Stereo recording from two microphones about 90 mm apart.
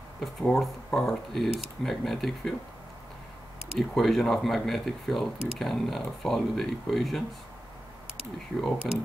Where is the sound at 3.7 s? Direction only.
5° left (ahead or behind).